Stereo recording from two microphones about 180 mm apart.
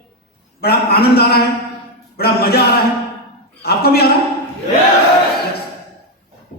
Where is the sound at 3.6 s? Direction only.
60° left (ahead or behind).